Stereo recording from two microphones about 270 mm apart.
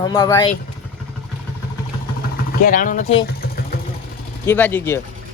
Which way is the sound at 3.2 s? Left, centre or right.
Left.